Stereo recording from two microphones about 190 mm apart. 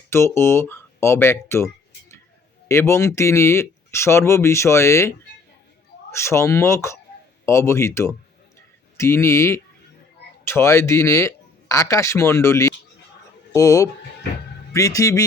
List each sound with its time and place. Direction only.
0.1 s speech: 15° left (ahead or behind)